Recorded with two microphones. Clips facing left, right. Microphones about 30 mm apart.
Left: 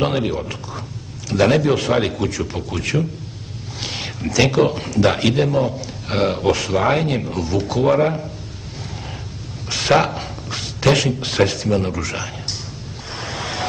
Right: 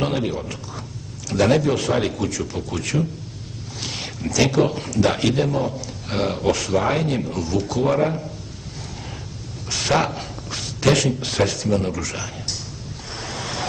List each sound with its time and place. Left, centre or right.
0.0 s speech: centre
9.7 s speech: centre
13.1 s a sound: centre